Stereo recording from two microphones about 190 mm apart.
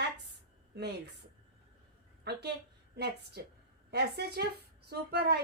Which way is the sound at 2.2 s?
60° right (ahead or behind).